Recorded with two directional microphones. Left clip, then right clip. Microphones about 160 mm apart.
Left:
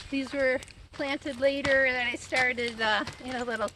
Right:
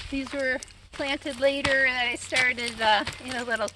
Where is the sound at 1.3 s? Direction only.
30° right (ahead or behind).